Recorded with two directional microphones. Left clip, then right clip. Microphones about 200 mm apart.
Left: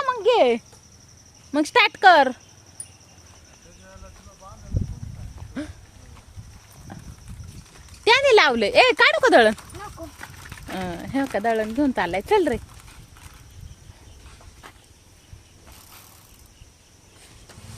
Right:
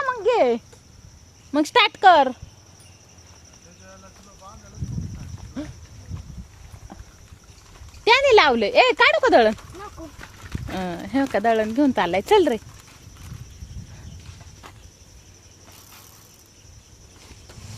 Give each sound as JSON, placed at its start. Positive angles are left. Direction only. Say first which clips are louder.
{"t": 0.0, "sound": "a sound", "louder": "left 1 dB", "side_deg": 5}
{"t": 1.5, "sound": "speech", "louder": "even", "side_deg": 0}
{"t": 5.6, "sound": "dog", "louder": "left 1 dB", "side_deg": 5}
{"t": 8.0, "sound": "speech", "louder": "right 1 dB", "side_deg": 5}
{"t": 9.6, "sound": "clip-clop", "louder": "left 1 dB", "side_deg": 40}
{"t": 10.7, "sound": "speech", "louder": "right 2 dB", "side_deg": -5}